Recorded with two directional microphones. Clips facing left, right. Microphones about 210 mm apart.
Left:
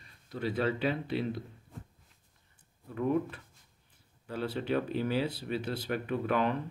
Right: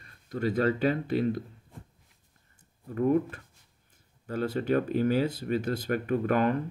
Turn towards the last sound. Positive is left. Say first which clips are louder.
# right 4 dB
turn(degrees=-45)  # may be behind; listen again after turning